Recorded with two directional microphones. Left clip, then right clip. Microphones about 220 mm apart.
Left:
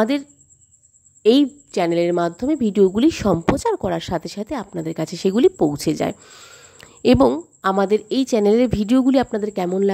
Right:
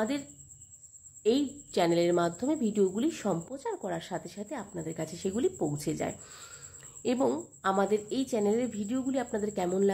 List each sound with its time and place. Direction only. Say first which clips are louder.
1.2 s a woman's voice: left 13 dB; 45° left (ahead or behind)
1.7 s a woman's voice: left 3 dB; 30° left (ahead or behind)
7.0 s a woman's voice: left 14 dB; 45° left (ahead or behind)